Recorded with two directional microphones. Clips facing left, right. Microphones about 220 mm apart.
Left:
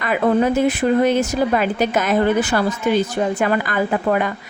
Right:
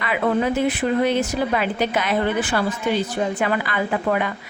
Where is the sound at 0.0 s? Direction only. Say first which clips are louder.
Left 4 dB; 45° left (ahead or behind).